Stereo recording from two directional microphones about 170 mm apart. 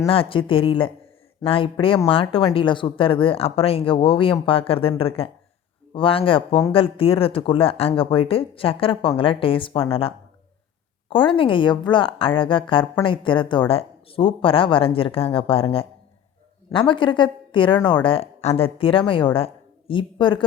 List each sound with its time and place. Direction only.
0.1 s a woman's voice: 30° left (ahead or behind)